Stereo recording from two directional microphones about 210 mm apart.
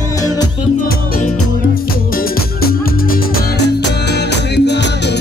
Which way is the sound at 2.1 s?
45° left (ahead or behind).